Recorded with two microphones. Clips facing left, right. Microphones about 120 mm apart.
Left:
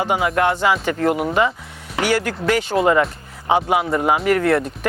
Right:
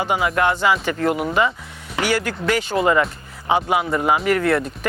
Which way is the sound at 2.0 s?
45° left (ahead or behind).